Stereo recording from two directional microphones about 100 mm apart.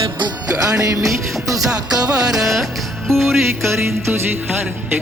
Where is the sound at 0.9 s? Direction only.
35° right (ahead or behind).